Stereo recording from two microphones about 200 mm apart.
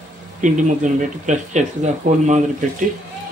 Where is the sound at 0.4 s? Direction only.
40° right (ahead or behind).